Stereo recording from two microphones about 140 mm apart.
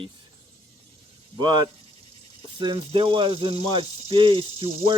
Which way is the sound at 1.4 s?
35° right (ahead or behind).